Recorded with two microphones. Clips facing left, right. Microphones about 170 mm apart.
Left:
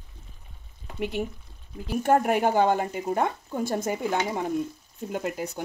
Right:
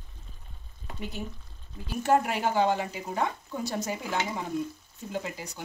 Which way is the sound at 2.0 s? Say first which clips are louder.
Left 3 dB; 55° left (ahead or behind).